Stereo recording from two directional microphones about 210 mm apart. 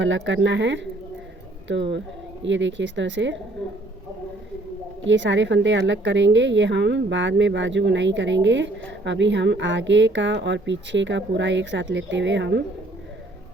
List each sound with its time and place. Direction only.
0.0 s a woman's voice: 60° right (ahead or behind)
5.0 s a woman's voice: 60° right (ahead or behind)